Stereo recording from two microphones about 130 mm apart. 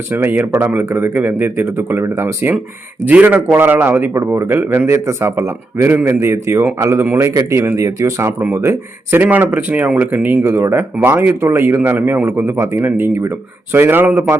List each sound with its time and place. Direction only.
0.1 s a man's voice: 15° right (ahead or behind)